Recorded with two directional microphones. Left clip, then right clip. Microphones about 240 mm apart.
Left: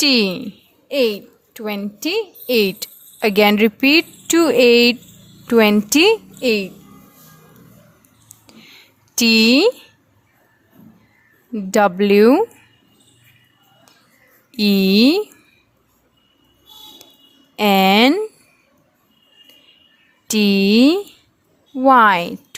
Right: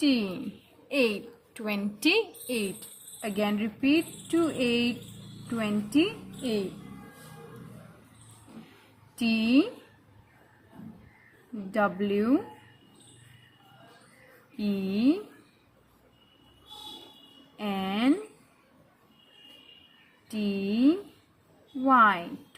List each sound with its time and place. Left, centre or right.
0.0 s a woman's voice: left
0.9 s a woman's voice: left
2.5 s speech: left
9.1 s speech: left
11.7 s speech: left
14.5 s speech: left
17.6 s speech: left
20.3 s speech: left